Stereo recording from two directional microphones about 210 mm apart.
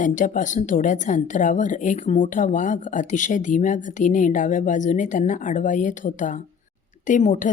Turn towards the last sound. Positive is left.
turn(degrees=35)  # may be behind; listen again after turning